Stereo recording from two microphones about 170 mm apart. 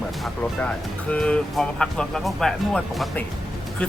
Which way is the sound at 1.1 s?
5° left (ahead or behind).